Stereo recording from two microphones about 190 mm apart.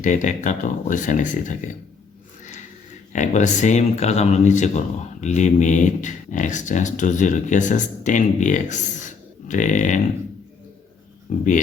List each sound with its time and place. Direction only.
0.0 s speech: 40° left (ahead or behind)
2.4 s a sound: 40° left (ahead or behind)
3.1 s speech: 40° left (ahead or behind)
11.3 s speech: 45° left (ahead or behind)